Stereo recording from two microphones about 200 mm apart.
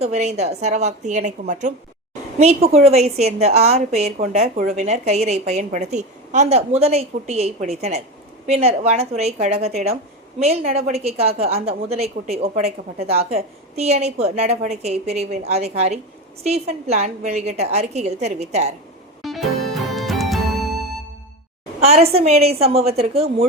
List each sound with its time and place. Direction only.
0.0 s a woman's voice: 35° right (ahead or behind)
19.2 s music: centre (ahead or behind)
21.8 s a woman's voice: 30° right (ahead or behind)